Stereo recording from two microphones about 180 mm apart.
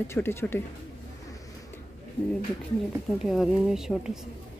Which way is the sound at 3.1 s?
Centre (ahead or behind).